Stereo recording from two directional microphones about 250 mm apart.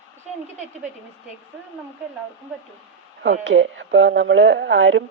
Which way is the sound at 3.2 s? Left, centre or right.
Right.